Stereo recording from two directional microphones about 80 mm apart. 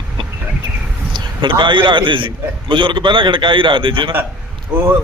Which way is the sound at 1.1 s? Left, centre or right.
Right.